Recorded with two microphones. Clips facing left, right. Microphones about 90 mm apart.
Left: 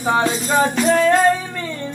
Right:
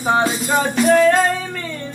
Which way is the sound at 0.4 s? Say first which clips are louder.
Even; 20° left (ahead or behind).